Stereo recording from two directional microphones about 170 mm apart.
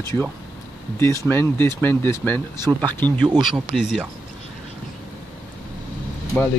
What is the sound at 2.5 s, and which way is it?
Speech, 25° right (ahead or behind).